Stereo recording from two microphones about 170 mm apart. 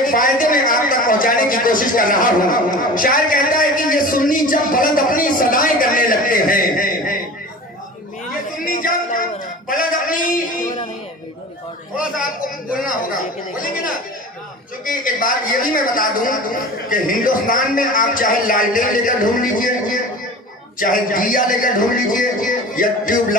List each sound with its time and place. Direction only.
0.0 s speech: 50° left (ahead or behind)
8.5 s a sound: 55° left (ahead or behind)
14.9 s speech: 55° left (ahead or behind)